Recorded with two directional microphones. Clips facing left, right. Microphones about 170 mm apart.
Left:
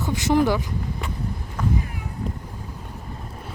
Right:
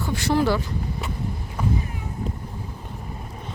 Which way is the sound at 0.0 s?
20° left (ahead or behind).